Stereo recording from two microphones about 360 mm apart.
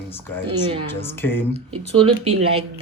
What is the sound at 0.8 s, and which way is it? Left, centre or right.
Speech, centre.